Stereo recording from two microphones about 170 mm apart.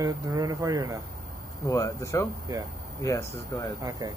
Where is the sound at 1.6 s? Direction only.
20° left (ahead or behind).